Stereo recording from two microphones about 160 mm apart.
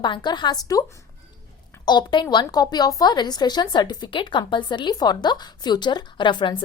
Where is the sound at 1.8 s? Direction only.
25° left (ahead or behind).